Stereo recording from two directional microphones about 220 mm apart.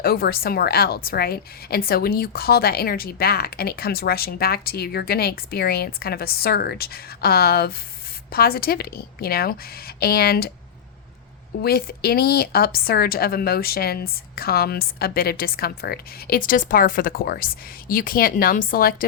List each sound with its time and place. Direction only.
0.0 s a woman's voice: 45° left (ahead or behind)
11.6 s a woman's voice: 45° left (ahead or behind)